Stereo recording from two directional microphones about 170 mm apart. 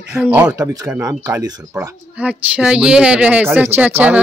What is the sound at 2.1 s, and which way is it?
Speech, 10° right (ahead or behind).